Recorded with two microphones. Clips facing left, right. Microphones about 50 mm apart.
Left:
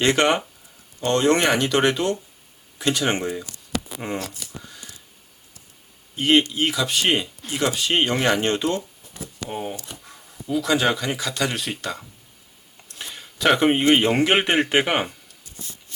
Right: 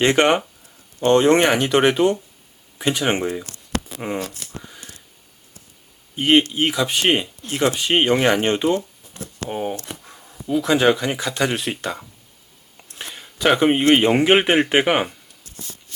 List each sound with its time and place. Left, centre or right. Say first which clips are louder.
0.0 s speech: right 3 dB; centre
6.1 s speech: right 2 dB; centre
9.7 s speech: right 5 dB; right
10.4 s speech: right 4 dB; centre
12.9 s a sound: right 2 dB; right
13.1 s a sound: right 2 dB; centre
13.9 s speech: right 3 dB; centre